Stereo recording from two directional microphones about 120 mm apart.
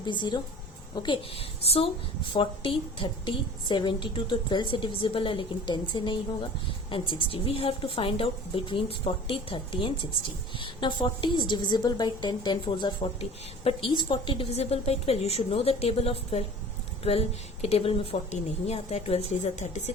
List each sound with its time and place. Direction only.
0.0 s a woman's voice: 40° left (ahead or behind)
14.5 s a woman's voice: 60° left (ahead or behind)